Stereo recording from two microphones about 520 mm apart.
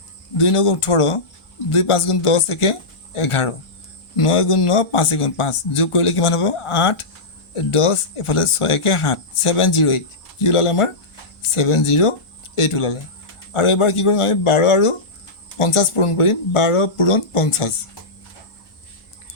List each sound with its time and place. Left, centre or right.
0.3 s speech: left